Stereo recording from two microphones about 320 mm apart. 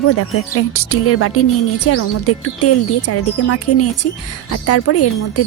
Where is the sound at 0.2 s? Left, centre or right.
Left.